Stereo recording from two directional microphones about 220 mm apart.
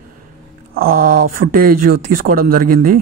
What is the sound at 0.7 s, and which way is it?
Speech, 40° right (ahead or behind).